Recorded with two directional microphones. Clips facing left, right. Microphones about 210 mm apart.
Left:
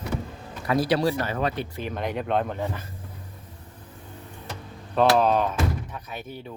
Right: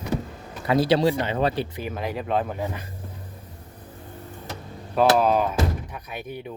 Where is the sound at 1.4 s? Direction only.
30° right (ahead or behind).